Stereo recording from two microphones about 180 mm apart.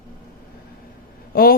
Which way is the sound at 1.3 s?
55° left (ahead or behind).